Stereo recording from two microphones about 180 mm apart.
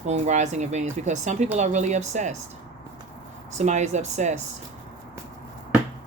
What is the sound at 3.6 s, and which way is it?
Speech, 40° right (ahead or behind).